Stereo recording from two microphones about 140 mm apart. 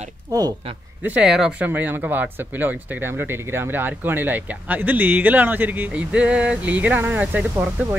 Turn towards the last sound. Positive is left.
turn(degrees=-5)  # may be behind; listen again after turning